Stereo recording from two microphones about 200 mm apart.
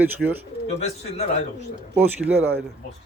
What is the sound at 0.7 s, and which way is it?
Speech, 35° left (ahead or behind).